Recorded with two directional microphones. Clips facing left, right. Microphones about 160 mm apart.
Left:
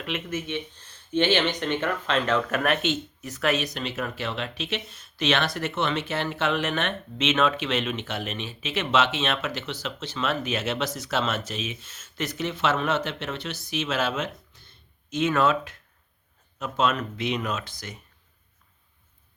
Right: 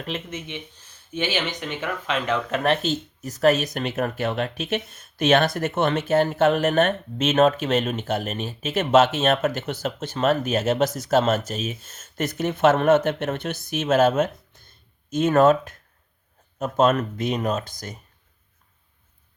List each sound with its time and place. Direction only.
0.3 s speech: 20° right (ahead or behind)
2.6 s speech: 40° right (ahead or behind)